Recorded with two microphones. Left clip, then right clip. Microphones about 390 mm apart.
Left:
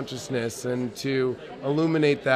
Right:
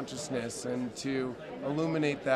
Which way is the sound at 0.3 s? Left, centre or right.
Left.